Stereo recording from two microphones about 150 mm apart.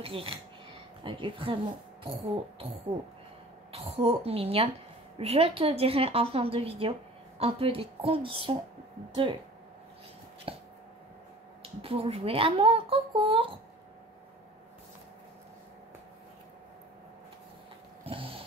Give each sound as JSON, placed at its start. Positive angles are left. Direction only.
{"t": 0.0, "sound": "a woman's voice", "side_deg": -40}
{"t": 3.7, "sound": "a woman's voice", "side_deg": -40}
{"t": 10.5, "sound": "a sound", "side_deg": -40}
{"t": 11.8, "sound": "a woman's voice", "side_deg": -40}
{"t": 18.0, "sound": "cat", "side_deg": -40}